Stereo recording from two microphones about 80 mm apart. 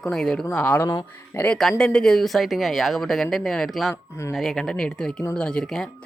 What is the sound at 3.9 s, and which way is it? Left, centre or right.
Speech, left.